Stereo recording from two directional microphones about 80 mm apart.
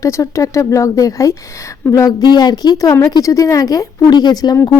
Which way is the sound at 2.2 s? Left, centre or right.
Left.